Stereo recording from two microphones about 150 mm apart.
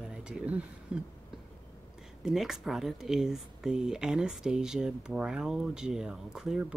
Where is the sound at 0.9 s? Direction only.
5° right (ahead or behind).